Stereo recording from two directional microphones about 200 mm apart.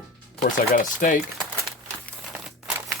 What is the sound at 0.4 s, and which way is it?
Speech, 40° left (ahead or behind).